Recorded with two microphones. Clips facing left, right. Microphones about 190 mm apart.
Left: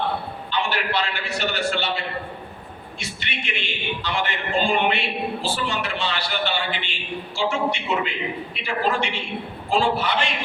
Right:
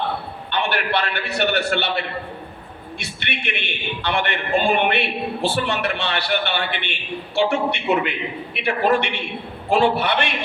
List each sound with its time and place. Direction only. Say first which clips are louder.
0.5 s a man's voice: right 3 dB; 60° right (ahead or behind)